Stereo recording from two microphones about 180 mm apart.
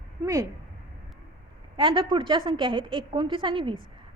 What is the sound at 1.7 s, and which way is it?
A woman's voice, 30° right (ahead or behind).